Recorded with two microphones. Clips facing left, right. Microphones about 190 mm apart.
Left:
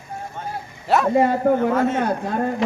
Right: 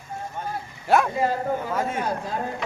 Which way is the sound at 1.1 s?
65° left (ahead or behind).